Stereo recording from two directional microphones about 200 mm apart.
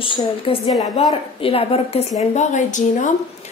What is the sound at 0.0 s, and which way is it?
A woman's voice, 25° left (ahead or behind).